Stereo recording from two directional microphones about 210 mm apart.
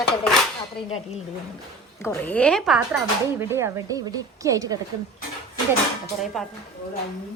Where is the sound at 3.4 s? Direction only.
10° right (ahead or behind).